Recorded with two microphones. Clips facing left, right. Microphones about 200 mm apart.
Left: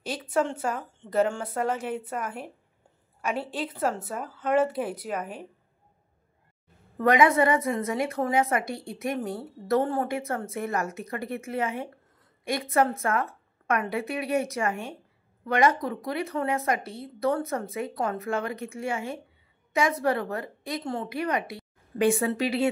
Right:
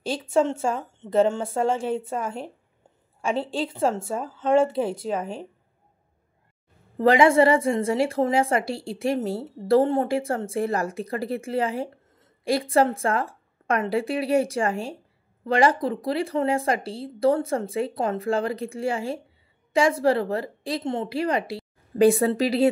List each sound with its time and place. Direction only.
0.0 s a woman's voice: 25° right (ahead or behind)
7.0 s a woman's voice: 30° right (ahead or behind)